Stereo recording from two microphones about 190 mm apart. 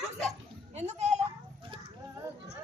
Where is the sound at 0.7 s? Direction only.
35° right (ahead or behind).